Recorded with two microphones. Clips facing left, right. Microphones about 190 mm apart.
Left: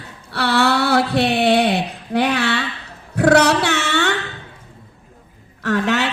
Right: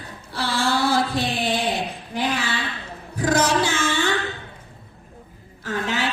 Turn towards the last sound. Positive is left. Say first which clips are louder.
# left 7 dB
turn(degrees=70)  # may be behind; listen again after turning